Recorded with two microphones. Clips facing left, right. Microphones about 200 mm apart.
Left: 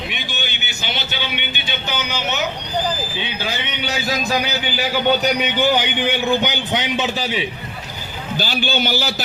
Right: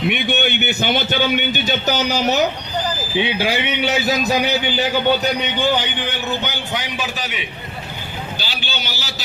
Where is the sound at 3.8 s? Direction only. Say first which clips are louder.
Right 3 dB; 25° right (ahead or behind).